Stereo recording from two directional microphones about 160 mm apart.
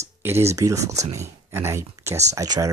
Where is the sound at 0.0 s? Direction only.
15° right (ahead or behind).